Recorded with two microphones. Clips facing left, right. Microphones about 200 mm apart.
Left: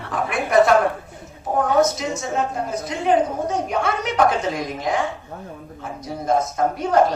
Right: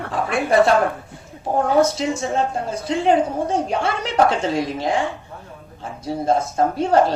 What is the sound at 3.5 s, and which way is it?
A woman's voice, 30° right (ahead or behind).